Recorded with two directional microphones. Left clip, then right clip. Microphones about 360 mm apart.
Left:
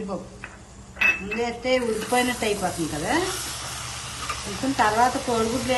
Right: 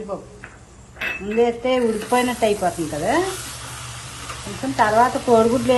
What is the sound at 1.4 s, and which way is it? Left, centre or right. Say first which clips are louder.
A woman's voice: right 4 dB; centre.